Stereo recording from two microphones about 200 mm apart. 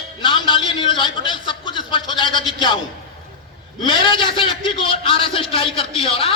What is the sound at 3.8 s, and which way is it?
A man's voice, 25° left (ahead or behind).